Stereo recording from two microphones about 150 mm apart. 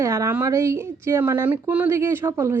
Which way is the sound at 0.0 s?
20° right (ahead or behind).